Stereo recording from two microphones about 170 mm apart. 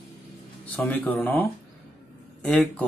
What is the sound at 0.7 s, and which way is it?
Speech, 10° left (ahead or behind).